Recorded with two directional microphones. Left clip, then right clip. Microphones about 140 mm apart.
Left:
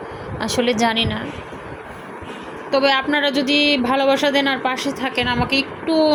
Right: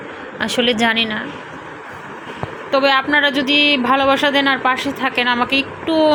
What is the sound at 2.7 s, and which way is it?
A woman's voice, 15° left (ahead or behind).